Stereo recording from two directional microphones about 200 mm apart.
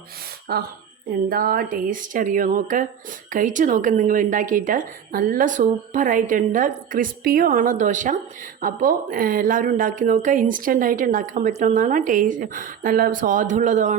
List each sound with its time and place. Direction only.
0.5 s speech: 50° right (ahead or behind)